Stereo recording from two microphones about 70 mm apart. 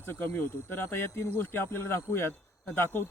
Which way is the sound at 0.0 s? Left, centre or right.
Left.